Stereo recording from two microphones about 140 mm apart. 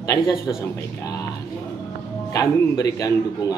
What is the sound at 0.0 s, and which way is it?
A man's voice, 25° left (ahead or behind).